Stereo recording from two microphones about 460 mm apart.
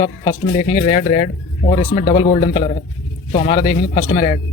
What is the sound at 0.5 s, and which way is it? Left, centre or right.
Speech, centre.